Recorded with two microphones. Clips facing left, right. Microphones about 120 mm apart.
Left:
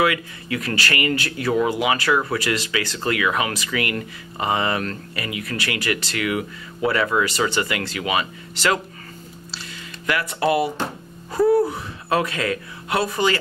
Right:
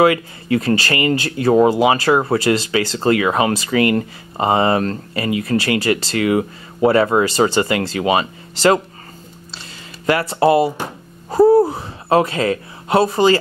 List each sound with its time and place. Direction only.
0.0 s speech: 30° right (ahead or behind)
10.0 s speech: 35° right (ahead or behind)
11.2 s gasp: 30° right (ahead or behind)